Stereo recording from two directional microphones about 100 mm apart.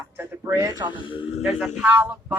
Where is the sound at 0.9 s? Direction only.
60° left (ahead or behind).